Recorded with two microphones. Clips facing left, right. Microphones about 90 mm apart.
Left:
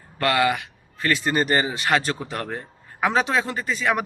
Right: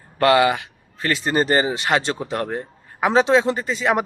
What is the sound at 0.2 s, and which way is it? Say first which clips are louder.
A man's voice: right 5 dB; 25° right (ahead or behind).